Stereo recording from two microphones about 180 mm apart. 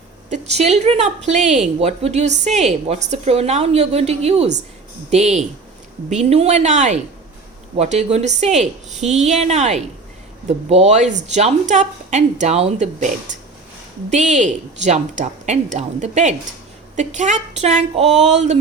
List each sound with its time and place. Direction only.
0.3 s a woman's voice: 40° right (ahead or behind)